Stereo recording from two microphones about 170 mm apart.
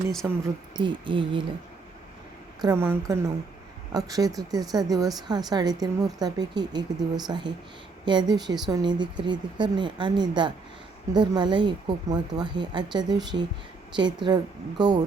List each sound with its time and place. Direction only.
0.2 s a woman's voice: 10° right (ahead or behind)
0.8 s speech: 30° right (ahead or behind)
2.6 s a woman's voice: 15° right (ahead or behind)